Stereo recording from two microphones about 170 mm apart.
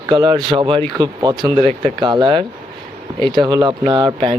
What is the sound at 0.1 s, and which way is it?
A man's voice, 25° right (ahead or behind).